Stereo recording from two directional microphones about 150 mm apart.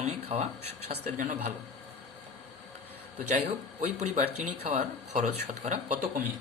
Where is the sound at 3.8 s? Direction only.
55° right (ahead or behind).